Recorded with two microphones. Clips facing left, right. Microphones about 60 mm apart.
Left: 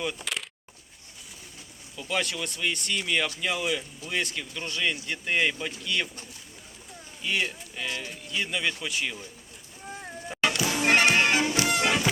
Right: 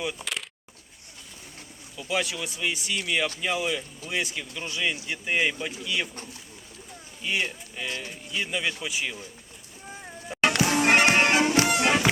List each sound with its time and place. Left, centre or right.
0.0 s speech: centre
2.0 s speech: centre
7.2 s speech: centre
9.8 s a sound: centre
10.6 s music: right
11.6 s music: right